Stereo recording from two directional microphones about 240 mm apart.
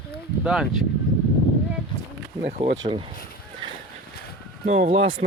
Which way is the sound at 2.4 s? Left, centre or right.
Right.